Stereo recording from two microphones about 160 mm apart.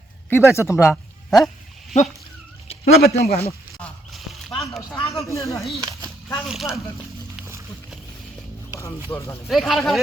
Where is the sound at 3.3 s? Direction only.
40° left (ahead or behind).